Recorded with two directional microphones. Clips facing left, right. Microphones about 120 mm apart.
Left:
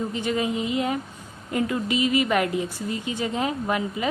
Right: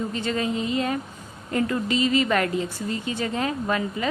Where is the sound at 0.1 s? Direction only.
15° left (ahead or behind).